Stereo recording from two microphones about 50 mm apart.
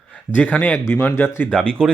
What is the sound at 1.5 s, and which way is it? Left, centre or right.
Speech, left.